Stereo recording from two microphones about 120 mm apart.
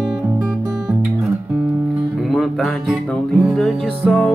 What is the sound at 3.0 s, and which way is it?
Music, 10° left (ahead or behind).